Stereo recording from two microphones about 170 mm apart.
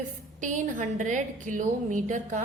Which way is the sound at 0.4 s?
50° right (ahead or behind).